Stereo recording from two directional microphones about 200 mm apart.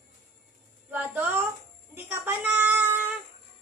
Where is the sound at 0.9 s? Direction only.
10° right (ahead or behind).